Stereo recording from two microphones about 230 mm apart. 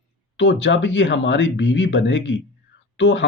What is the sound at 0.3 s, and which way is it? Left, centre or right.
Speech, left.